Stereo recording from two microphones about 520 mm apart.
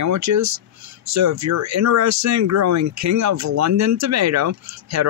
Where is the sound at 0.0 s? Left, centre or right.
Right.